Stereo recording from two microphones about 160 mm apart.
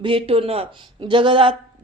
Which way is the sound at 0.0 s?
35° right (ahead or behind).